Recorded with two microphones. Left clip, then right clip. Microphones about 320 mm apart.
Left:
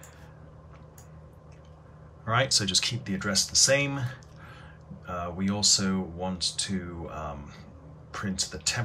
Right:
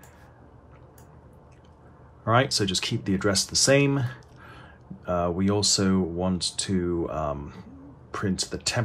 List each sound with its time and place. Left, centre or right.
2.2 s speech: centre